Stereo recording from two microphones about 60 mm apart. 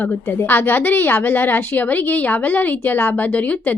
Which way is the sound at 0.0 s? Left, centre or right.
Left.